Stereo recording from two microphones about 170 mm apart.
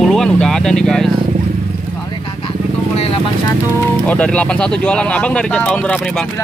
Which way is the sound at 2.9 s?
35° left (ahead or behind).